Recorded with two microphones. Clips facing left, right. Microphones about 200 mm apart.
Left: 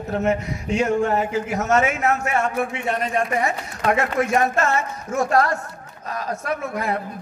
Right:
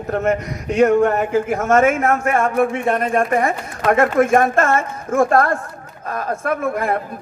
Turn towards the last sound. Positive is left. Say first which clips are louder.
# right 5 dB
turn(degrees=-55)  # may be behind; listen again after turning